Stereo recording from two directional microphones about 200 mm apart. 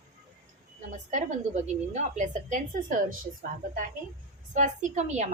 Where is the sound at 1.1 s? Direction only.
35° right (ahead or behind).